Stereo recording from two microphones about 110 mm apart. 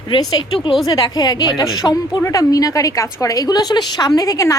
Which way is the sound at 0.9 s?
40° left (ahead or behind).